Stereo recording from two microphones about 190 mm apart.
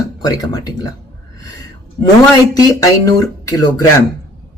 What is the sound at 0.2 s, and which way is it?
Speech, 20° left (ahead or behind).